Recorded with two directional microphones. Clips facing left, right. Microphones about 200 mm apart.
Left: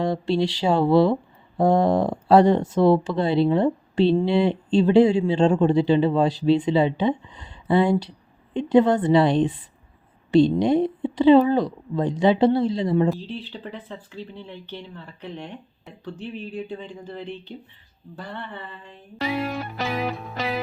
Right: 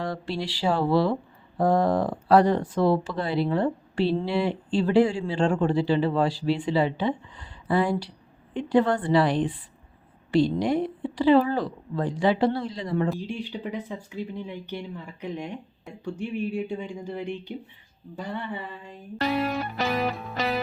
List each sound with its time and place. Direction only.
0.0 s speech: 25° left (ahead or behind)
13.1 s speech: 15° right (ahead or behind)